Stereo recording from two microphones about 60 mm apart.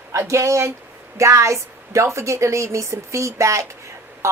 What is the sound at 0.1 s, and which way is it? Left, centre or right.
Speech, right.